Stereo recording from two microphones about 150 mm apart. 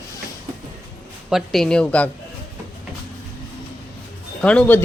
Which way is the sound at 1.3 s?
Centre (ahead or behind).